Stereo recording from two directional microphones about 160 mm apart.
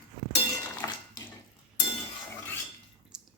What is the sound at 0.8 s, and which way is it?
Dishes, 20° left (ahead or behind).